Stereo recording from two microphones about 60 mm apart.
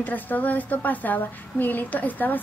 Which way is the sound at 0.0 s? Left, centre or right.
Left.